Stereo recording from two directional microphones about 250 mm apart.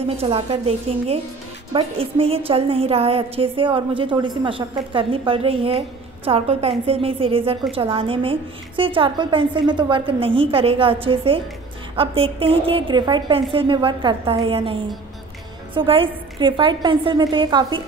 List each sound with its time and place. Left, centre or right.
0.2 s a woman's voice: right